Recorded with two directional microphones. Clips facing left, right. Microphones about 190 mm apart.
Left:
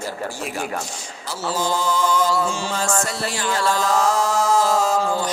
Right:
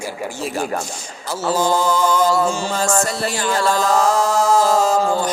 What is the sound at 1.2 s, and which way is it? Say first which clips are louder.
Mantra: right 5 dB; 50° right (ahead or behind).